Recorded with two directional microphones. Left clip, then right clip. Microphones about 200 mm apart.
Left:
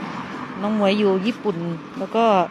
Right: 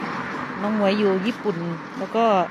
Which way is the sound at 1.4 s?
30° left (ahead or behind).